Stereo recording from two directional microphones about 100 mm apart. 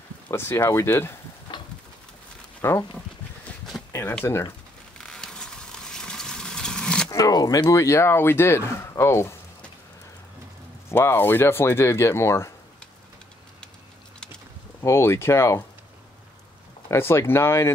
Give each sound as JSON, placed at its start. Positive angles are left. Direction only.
{"t": 0.3, "sound": "speech", "side_deg": 25}
{"t": 1.5, "sound": "a sound", "side_deg": 50}
{"t": 2.6, "sound": "speech", "side_deg": 25}
{"t": 3.7, "sound": "a sound", "side_deg": 0}
{"t": 4.2, "sound": "speech", "side_deg": 25}
{"t": 4.9, "sound": "a sound", "side_deg": 5}
{"t": 7.1, "sound": "speech", "side_deg": 40}
{"t": 10.9, "sound": "speech", "side_deg": 25}
{"t": 14.8, "sound": "speech", "side_deg": 25}
{"t": 16.9, "sound": "speech", "side_deg": 25}